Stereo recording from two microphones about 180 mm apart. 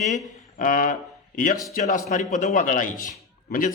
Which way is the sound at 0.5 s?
50° left (ahead or behind).